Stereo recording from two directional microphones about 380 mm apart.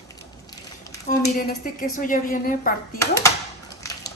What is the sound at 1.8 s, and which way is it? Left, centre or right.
Speech, left.